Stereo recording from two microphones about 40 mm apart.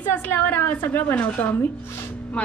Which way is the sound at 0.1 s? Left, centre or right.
Left.